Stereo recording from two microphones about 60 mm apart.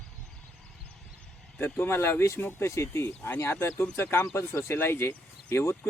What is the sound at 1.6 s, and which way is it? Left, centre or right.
Speech, left.